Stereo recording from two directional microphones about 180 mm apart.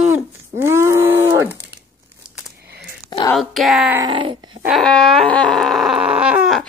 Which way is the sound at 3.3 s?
Centre (ahead or behind).